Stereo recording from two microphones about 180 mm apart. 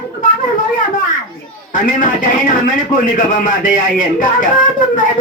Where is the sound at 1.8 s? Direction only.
45° left (ahead or behind).